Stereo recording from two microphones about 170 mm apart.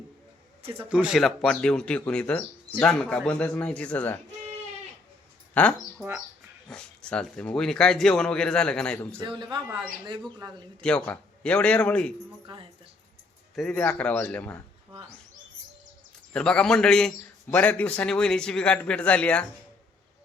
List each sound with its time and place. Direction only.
0.9 s speech: 5° right (ahead or behind)
5.6 s a man's voice: 10° left (ahead or behind)
6.0 s speech: 5° right (ahead or behind)
6.7 s speech: 5° left (ahead or behind)
9.2 s speech: 25° right (ahead or behind)
10.8 s a man's voice: 5° left (ahead or behind)
13.6 s a man's voice: 5° left (ahead or behind)
16.3 s a man's voice: 5° left (ahead or behind)